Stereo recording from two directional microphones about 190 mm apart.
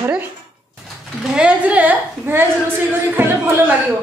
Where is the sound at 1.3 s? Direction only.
5° right (ahead or behind).